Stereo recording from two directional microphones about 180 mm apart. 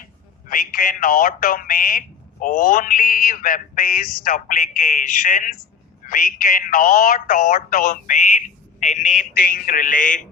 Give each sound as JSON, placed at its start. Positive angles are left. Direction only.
{"t": 0.4, "sound": "speech", "side_deg": 50}